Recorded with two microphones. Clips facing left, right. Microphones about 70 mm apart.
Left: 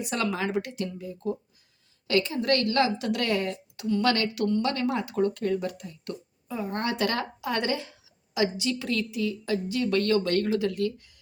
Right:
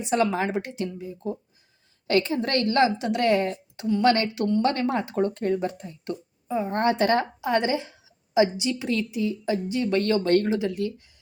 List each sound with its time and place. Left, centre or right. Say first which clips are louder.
0.0 s speech: right 5 dB; right
2.0 s speech: right 1 dB; right